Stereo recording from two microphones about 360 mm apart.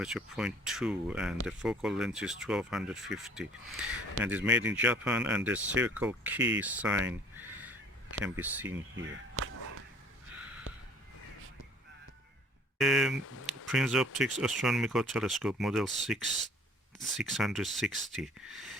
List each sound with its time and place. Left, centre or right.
0.0 s speech: centre
8.2 s speech: centre
8.7 s speech: right
12.8 s speech: centre
13.2 s a sound: left
13.7 s speech: centre